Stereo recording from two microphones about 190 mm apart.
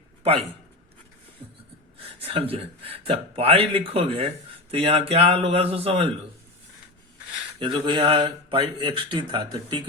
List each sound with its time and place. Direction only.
2.2 s speech: 30° right (ahead or behind)
7.6 s speech: 25° right (ahead or behind)